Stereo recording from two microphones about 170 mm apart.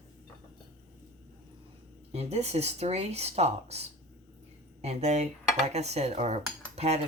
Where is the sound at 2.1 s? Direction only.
40° right (ahead or behind).